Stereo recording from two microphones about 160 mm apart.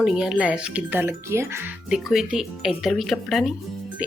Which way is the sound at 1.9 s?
Centre (ahead or behind).